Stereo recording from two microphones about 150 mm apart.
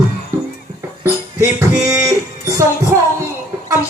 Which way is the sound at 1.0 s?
20° right (ahead or behind).